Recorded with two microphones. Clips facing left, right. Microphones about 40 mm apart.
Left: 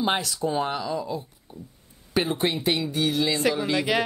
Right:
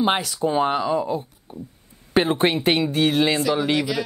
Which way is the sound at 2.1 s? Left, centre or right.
Right.